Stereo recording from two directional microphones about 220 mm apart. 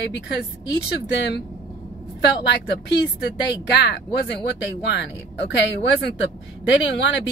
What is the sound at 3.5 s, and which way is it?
Speech, 50° left (ahead or behind).